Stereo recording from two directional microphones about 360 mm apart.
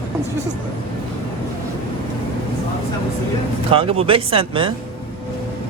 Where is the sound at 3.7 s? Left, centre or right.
Centre.